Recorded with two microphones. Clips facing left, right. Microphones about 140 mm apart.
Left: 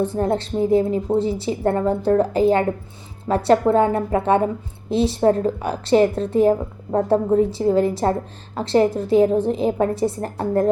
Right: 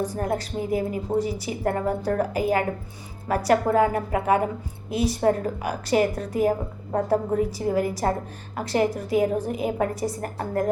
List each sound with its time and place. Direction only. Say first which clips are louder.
0.0 s a woman's voice: left 6 dB; 25° left (ahead or behind)